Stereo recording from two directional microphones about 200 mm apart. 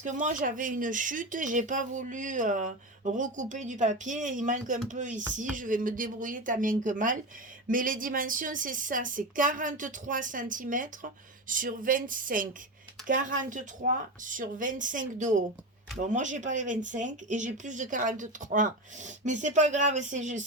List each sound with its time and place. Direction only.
0.0 s speech: 40° right (ahead or behind)